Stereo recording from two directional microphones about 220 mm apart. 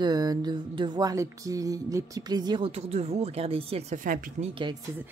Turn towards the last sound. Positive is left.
turn(degrees=-20)  # may be behind; listen again after turning